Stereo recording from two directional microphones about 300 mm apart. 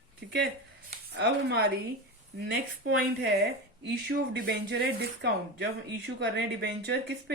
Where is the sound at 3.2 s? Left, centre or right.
Right.